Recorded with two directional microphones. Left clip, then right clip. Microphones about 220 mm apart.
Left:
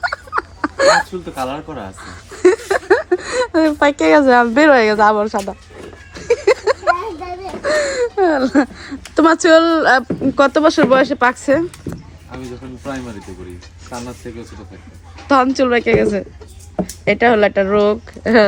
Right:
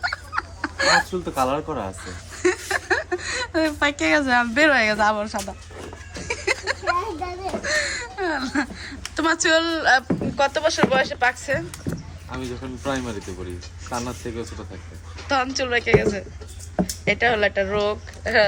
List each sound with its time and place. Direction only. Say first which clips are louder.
0.0 s a sound: left 6 dB; centre (ahead or behind)
1.2 s speech: right 1 dB; 25° right (ahead or behind)
2.0 s chuckle: left 9 dB; 5° right (ahead or behind)
3.2 s a woman's voice: left 7 dB; centre (ahead or behind)
6.1 s a sound: left 11 dB; 5° right (ahead or behind)
7.6 s speech: left 10 dB; centre (ahead or behind)
13.9 s speech: even; 20° right (ahead or behind)
15.5 s speech: left 6 dB; 20° left (ahead or behind)